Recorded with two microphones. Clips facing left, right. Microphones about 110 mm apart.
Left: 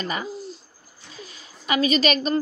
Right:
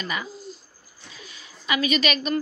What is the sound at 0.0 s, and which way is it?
A woman's voice, 40° left (ahead or behind).